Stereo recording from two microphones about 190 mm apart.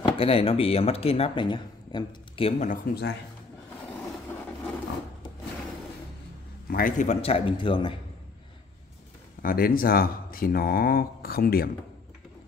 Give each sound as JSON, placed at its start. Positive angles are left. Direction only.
{"t": 0.0, "sound": "speech", "side_deg": 30}
{"t": 2.7, "sound": "speech", "side_deg": 60}
{"t": 6.7, "sound": "a man's voice", "side_deg": 45}
{"t": 9.4, "sound": "speech", "side_deg": 50}